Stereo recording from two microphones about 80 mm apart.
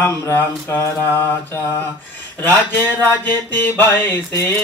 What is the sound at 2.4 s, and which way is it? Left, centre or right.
Mantra, left.